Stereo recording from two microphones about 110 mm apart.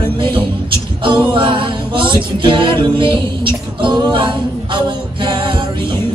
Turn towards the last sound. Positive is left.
turn(degrees=-45)  # may be behind; listen again after turning